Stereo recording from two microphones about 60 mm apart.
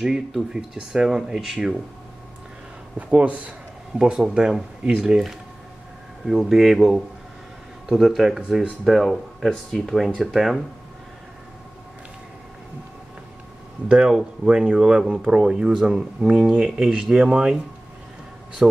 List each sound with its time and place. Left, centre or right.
0.3 s speech: centre
3.0 s speech: right
4.0 s speech: centre
6.2 s speech: centre
13.8 s speech: centre
18.6 s speech: centre